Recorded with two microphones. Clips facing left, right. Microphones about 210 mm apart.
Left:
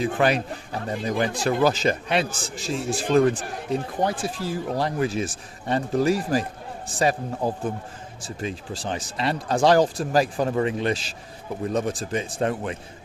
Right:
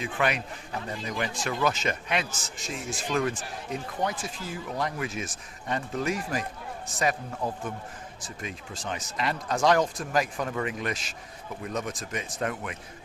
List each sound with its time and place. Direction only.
0.0 s speech: 35° left (ahead or behind)